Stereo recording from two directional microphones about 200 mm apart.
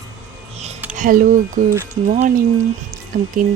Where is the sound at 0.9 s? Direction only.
45° right (ahead or behind).